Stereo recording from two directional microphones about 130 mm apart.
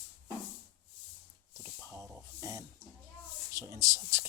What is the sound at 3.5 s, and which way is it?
Speech, 25° right (ahead or behind).